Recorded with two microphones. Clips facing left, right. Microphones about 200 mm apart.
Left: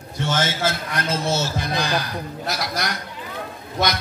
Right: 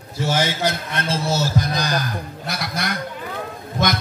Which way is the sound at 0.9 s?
30° right (ahead or behind).